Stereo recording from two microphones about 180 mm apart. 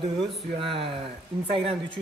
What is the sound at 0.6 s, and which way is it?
Speech, 30° right (ahead or behind).